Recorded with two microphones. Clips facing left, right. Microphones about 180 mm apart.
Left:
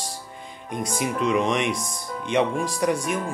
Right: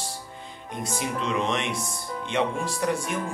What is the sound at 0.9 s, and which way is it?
Speech, 15° left (ahead or behind).